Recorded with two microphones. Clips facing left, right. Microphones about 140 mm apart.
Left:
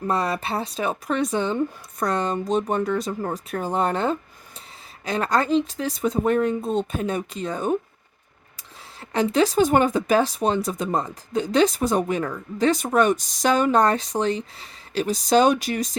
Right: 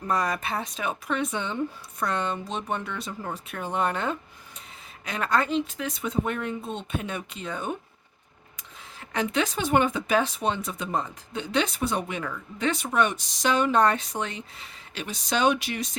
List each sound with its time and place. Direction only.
0.1 s speech: 30° left (ahead or behind)
9.0 s speech: 35° left (ahead or behind)